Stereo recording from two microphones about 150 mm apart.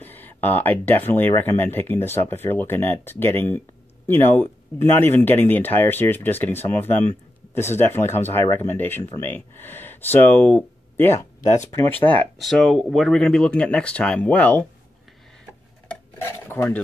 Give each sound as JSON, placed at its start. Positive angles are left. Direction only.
{"t": 0.0, "sound": "speech", "side_deg": 10}
{"t": 15.9, "sound": "cutlery", "side_deg": 15}